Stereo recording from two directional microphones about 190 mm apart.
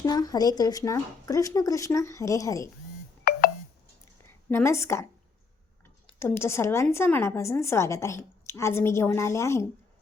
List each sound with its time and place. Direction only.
0.0 s a woman's voice: 20° left (ahead or behind)
3.3 s telephone dialing: 55° left (ahead or behind)
4.4 s a woman's voice: 15° left (ahead or behind)
6.1 s a woman's voice: 10° left (ahead or behind)